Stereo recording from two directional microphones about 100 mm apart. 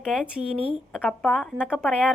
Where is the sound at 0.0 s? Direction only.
5° right (ahead or behind).